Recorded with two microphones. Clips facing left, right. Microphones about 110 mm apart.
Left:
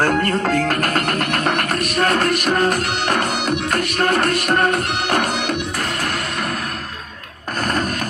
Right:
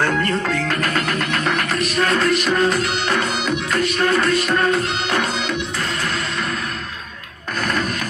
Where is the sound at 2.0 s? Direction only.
50° left (ahead or behind).